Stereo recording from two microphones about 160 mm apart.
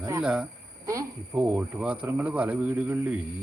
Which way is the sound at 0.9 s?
20° right (ahead or behind).